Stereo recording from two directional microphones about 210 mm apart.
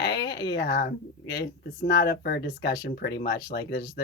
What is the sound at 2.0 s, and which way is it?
Speech, 50° left (ahead or behind).